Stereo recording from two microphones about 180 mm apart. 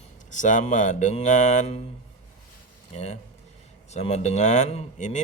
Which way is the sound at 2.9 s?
35° left (ahead or behind).